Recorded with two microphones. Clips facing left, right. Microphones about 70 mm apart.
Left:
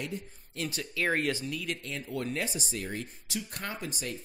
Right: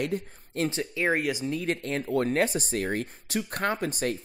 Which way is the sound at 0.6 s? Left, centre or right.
Right.